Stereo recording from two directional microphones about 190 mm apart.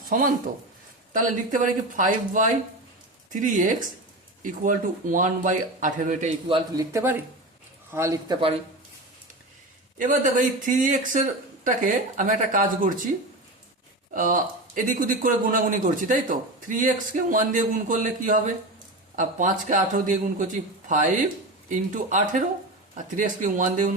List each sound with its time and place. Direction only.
0.1 s speech: 45° right (ahead or behind)
6.5 s speech: 15° right (ahead or behind)
10.0 s speech: 45° right (ahead or behind)
14.1 s speech: 45° right (ahead or behind)